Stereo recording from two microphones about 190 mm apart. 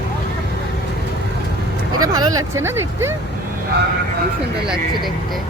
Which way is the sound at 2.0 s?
20° right (ahead or behind).